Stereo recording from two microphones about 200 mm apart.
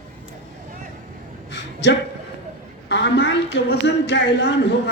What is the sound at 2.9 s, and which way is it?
A woman's voice, 60° left (ahead or behind).